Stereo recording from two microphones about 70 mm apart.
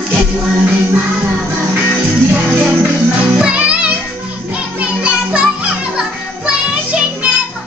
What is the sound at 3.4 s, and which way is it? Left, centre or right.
Music, centre.